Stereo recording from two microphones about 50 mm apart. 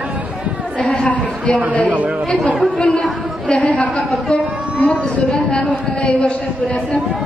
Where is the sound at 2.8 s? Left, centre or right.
Centre.